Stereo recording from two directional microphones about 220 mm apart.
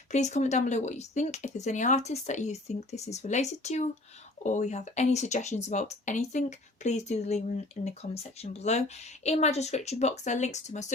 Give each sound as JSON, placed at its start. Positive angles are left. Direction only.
{"t": 0.1, "sound": "speech", "side_deg": 30}